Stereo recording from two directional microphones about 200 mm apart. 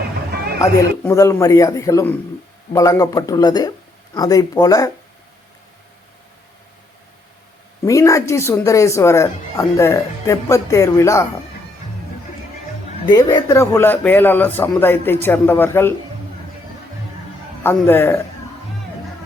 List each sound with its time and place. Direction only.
0.6 s speech: 15° left (ahead or behind)
7.9 s speech: 15° left (ahead or behind)
13.1 s speech: 20° left (ahead or behind)
17.6 s speech: 10° left (ahead or behind)